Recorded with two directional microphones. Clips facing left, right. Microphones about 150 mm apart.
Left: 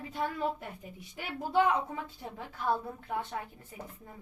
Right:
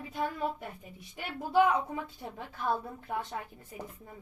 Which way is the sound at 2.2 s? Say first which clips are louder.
Even; 20° right (ahead or behind).